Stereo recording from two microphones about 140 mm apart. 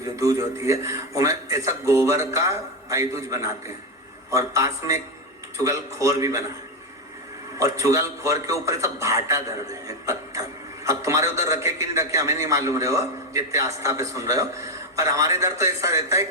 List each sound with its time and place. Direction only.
0.0 s a man's voice: 20° right (ahead or behind)
7.6 s a man's voice: 20° right (ahead or behind)